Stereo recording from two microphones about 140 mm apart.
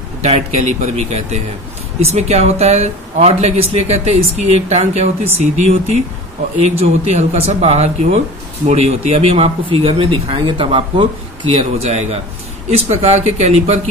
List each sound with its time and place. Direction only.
0.2 s speech: 50° right (ahead or behind)
6.8 s speech: 45° right (ahead or behind)